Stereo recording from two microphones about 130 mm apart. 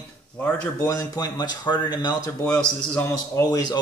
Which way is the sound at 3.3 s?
30° left (ahead or behind).